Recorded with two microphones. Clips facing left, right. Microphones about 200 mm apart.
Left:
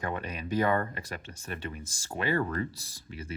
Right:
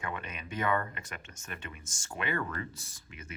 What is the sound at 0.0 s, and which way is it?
Speech, 40° left (ahead or behind).